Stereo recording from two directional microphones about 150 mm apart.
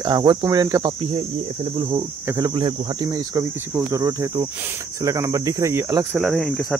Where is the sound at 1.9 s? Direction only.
25° right (ahead or behind).